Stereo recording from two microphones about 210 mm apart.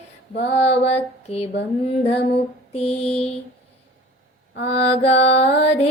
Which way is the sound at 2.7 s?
30° left (ahead or behind).